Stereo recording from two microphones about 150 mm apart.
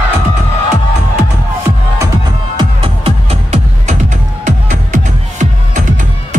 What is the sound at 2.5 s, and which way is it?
Music, 40° right (ahead or behind).